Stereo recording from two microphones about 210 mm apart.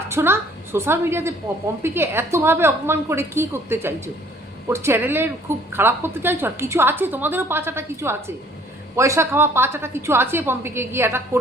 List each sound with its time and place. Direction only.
0.1 s a woman's voice: 10° right (ahead or behind)